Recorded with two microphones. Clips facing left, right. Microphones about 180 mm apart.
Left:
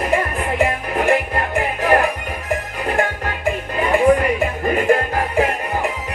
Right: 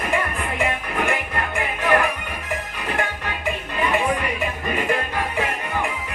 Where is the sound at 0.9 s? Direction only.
35° left (ahead or behind).